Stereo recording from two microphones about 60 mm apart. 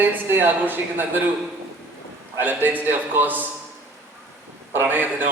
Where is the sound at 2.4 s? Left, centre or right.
Right.